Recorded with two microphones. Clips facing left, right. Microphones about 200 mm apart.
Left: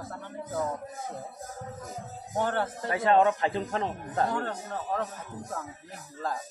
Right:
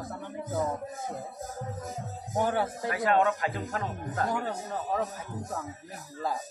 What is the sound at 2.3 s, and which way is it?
Speech, 10° right (ahead or behind).